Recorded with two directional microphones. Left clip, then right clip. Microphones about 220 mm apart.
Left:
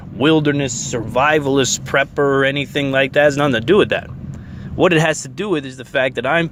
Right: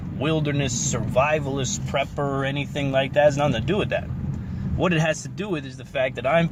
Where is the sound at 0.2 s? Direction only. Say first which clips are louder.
Left 10 dB; 45° left (ahead or behind).